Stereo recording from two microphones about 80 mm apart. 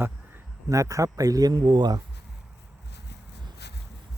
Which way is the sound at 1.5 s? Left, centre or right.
Right.